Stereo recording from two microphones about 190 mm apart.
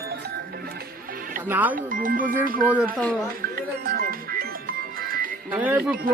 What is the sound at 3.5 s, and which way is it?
Music, 50° right (ahead or behind).